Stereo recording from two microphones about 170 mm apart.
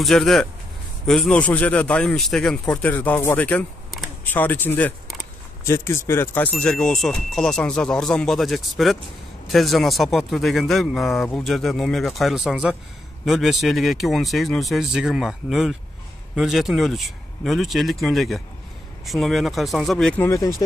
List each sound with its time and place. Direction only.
0.0 s speech: centre (ahead or behind)
20.2 s speech: 20° left (ahead or behind)